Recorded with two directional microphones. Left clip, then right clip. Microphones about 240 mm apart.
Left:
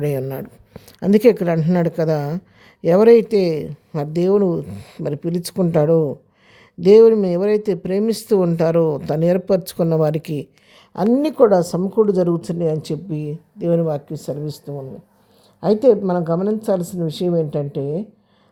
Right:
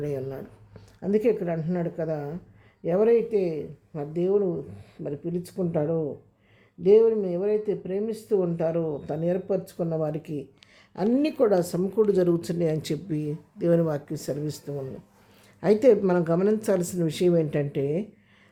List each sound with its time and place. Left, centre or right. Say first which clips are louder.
0.0 s speech: left 8 dB; left
10.9 s speech: left 7 dB; left
15.6 s speech: left 5 dB; centre